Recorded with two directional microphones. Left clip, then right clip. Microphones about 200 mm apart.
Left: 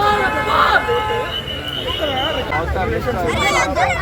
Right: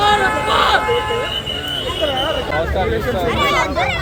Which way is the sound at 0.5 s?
30° right (ahead or behind).